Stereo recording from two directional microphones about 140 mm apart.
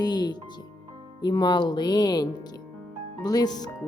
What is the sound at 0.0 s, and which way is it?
Speech, 30° left (ahead or behind).